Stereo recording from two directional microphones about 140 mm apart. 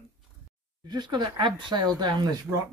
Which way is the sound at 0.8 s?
30° right (ahead or behind).